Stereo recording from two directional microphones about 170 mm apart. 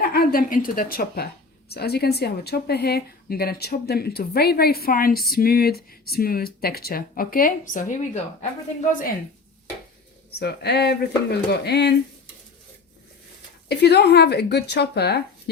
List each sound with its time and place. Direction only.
0.1 s a woman's voice: 60° left (ahead or behind)
10.4 s speech: 75° left (ahead or behind)
13.7 s speech: 75° left (ahead or behind)